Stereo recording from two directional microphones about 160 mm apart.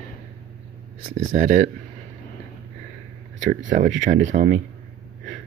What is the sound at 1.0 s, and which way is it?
Speech, 55° right (ahead or behind).